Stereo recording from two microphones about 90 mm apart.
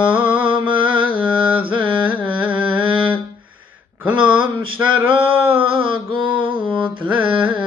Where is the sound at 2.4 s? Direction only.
15° right (ahead or behind).